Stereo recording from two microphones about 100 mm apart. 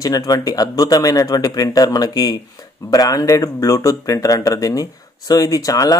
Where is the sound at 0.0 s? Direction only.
40° left (ahead or behind).